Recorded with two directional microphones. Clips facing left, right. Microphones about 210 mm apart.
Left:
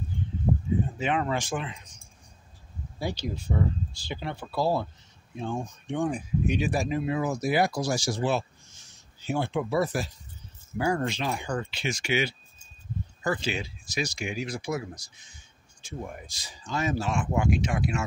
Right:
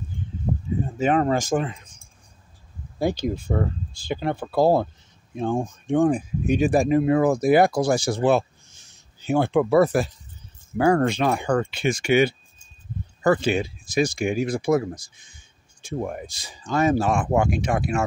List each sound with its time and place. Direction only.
0.1 s a sound: 50° right (ahead or behind)
0.9 s speech: 45° right (ahead or behind)
3.0 s speech: 50° right (ahead or behind)